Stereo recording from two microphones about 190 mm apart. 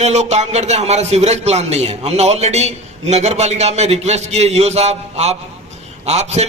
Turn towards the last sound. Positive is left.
turn(degrees=-35)  # may be behind; listen again after turning